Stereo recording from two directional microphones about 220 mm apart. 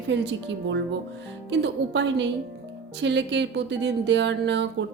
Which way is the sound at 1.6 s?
55° right (ahead or behind).